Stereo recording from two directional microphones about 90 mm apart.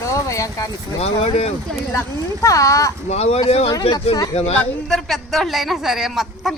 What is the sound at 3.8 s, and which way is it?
Speech, 90° left.